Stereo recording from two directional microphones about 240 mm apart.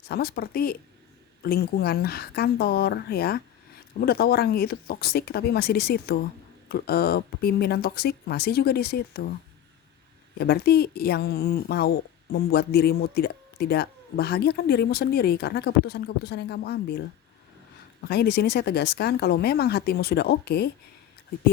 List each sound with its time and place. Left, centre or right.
0.1 s speech: left
10.3 s speech: left
18.1 s speech: left